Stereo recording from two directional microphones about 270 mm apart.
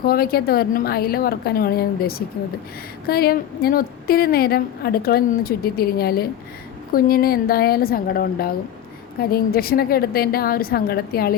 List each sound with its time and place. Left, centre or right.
0.0 s a woman's voice: left